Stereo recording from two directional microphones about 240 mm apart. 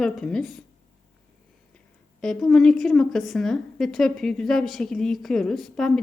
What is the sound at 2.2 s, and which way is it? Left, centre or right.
A woman's voice, centre.